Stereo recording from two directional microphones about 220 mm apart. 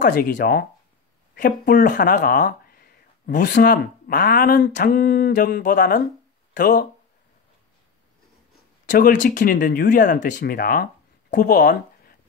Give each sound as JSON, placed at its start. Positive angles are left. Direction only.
{"t": 0.0, "sound": "speech", "side_deg": 40}
{"t": 8.8, "sound": "speech", "side_deg": 35}